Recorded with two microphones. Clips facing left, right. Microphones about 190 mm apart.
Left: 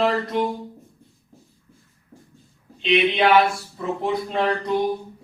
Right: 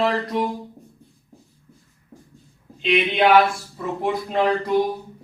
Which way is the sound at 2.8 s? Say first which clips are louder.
Even; centre (ahead or behind).